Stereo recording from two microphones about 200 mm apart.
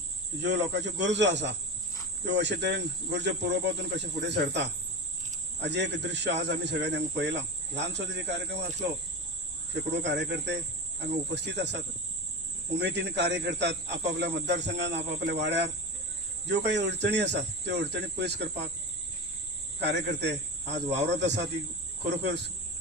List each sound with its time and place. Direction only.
0.4 s speech: 60° right (ahead or behind)
9.7 s speech: 60° right (ahead or behind)
19.8 s speech: 60° right (ahead or behind)